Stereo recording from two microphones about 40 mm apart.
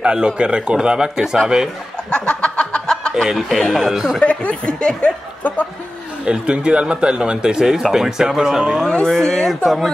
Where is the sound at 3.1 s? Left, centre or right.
Centre.